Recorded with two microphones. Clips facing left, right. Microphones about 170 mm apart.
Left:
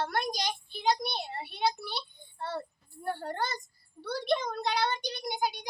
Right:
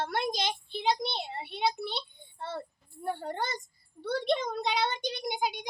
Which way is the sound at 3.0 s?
20° right (ahead or behind).